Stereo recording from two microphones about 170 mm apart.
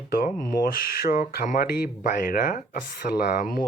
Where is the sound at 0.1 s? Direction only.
60° left (ahead or behind).